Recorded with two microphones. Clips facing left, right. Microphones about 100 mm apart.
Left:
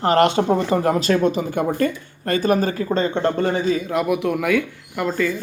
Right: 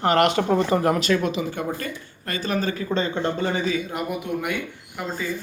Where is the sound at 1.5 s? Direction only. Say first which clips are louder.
Left 7 dB; 60° left (ahead or behind).